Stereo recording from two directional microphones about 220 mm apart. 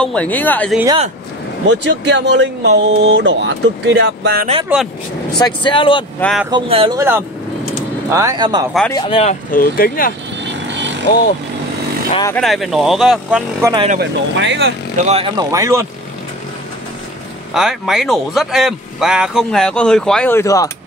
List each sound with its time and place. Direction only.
0.0 s speech: 5° left (ahead or behind)
1.7 s speech: 55° right (ahead or behind)
4.7 s speech: 5° right (ahead or behind)
5.4 s speech: 20° left (ahead or behind)
6.1 s speech: 5° left (ahead or behind)
6.5 s speech: 20° right (ahead or behind)
7.0 s speech: 10° right (ahead or behind)
8.9 s speech: 25° left (ahead or behind)
10.4 s vehicle: 55° right (ahead or behind)
12.4 s speech: centre (ahead or behind)
13.6 s speech: 15° right (ahead or behind)
13.9 s speech: 55° right (ahead or behind)
15.0 s speech: 25° right (ahead or behind)
17.6 s speech: centre (ahead or behind)